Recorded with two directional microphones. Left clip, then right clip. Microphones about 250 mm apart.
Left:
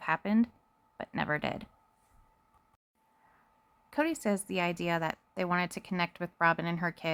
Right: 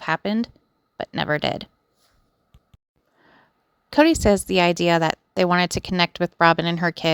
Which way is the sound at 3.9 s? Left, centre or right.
Right.